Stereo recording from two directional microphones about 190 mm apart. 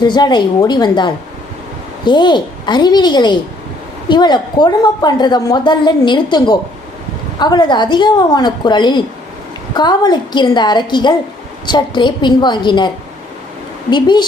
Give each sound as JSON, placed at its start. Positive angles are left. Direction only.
{"t": 0.0, "sound": "a woman's voice", "side_deg": 25}
{"t": 13.9, "sound": "a woman's voice", "side_deg": 25}